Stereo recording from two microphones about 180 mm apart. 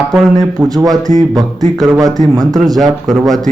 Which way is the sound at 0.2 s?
Centre (ahead or behind).